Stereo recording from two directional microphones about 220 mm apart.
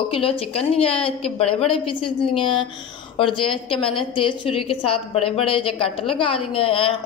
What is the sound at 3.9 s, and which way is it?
A woman's voice, 25° left (ahead or behind).